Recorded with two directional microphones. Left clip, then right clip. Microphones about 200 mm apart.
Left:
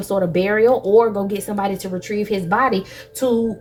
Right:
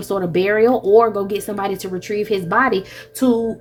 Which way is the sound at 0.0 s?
35° right (ahead or behind).